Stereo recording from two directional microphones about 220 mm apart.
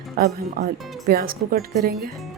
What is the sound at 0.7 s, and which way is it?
Speech, centre (ahead or behind).